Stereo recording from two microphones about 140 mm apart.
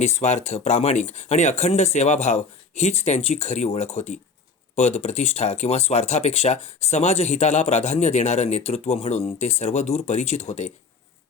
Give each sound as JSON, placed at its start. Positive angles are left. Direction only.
{"t": 0.0, "sound": "speech", "side_deg": 55}